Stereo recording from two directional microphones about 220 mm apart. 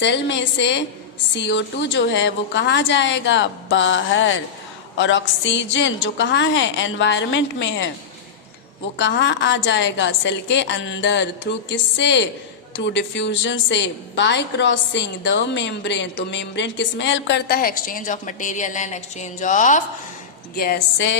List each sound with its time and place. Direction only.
0.0 s a woman's voice: 55° left (ahead or behind)
9.0 s a woman's voice: 55° left (ahead or behind); by 19.8 s 35° left (ahead or behind)
20.6 s a woman's voice: 45° left (ahead or behind)